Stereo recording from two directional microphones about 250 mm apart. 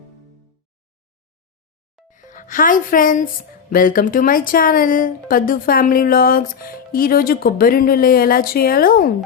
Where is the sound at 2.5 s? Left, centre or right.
Left.